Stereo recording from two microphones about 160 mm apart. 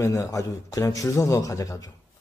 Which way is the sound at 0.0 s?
20° left (ahead or behind).